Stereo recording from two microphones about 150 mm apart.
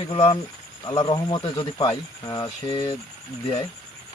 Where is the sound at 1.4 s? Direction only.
40° left (ahead or behind).